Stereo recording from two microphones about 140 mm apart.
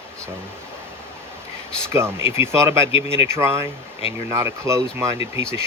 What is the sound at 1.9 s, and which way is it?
Speech, 20° right (ahead or behind).